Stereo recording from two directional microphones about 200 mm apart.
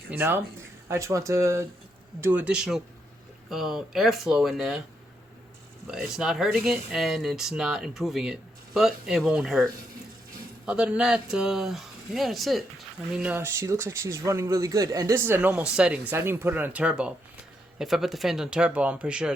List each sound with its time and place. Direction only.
0.1 s a man's voice: 10° right (ahead or behind)
5.9 s speech: centre (ahead or behind)
10.7 s a man's voice: 5° right (ahead or behind)